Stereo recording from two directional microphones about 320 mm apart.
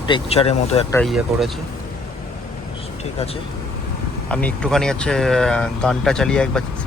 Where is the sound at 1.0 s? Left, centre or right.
Centre.